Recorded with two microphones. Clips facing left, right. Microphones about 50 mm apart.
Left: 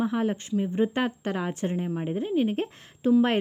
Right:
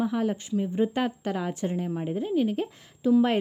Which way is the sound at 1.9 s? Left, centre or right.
Centre.